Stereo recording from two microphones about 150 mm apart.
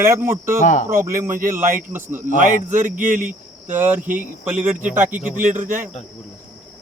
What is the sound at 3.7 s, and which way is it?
Speech, 15° right (ahead or behind).